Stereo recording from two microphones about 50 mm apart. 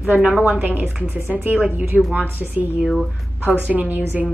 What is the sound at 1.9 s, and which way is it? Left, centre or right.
Speech, centre.